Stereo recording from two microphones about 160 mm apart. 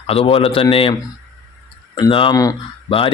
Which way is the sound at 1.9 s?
30° left (ahead or behind).